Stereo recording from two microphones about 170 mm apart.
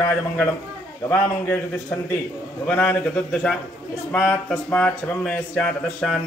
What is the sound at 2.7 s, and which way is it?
Speech, 10° left (ahead or behind).